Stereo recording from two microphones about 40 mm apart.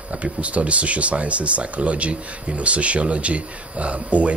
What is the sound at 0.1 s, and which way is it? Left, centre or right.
Speech, right.